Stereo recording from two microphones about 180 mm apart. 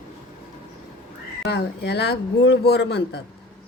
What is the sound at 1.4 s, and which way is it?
Speech, 65° left (ahead or behind).